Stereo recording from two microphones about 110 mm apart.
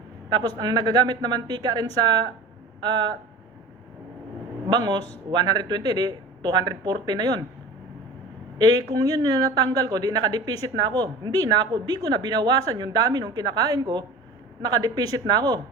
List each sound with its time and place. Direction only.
0.3 s speech: 35° right (ahead or behind)
4.7 s speech: 40° right (ahead or behind)
8.6 s speech: 35° right (ahead or behind)